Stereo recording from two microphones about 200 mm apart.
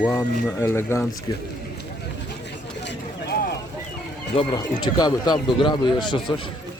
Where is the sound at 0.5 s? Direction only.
10° left (ahead or behind).